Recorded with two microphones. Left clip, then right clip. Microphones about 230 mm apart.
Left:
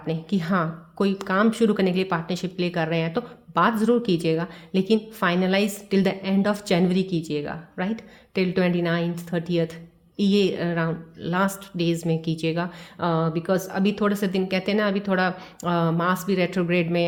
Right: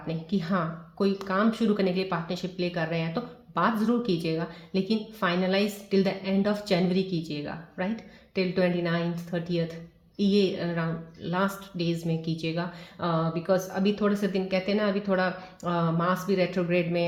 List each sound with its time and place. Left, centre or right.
0.1 s speech: left